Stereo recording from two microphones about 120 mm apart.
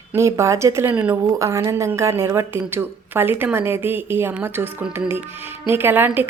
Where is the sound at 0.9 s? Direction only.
10° right (ahead or behind).